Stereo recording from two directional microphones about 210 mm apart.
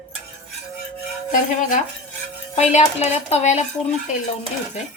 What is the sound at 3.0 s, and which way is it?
Speech, 30° left (ahead or behind).